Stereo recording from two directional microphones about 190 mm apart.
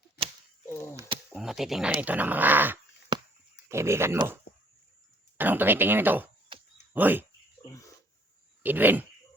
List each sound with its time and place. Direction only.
0.9 s speech: 25° right (ahead or behind)
1.3 s speech: centre (ahead or behind)
5.4 s speech: 10° right (ahead or behind)
7.6 s a sound: 15° left (ahead or behind)
8.6 s speech: 10° right (ahead or behind)